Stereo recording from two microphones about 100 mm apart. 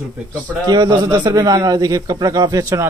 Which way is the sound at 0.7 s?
40° right (ahead or behind).